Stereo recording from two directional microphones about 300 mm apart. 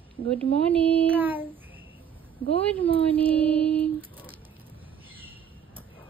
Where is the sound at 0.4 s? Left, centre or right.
Centre.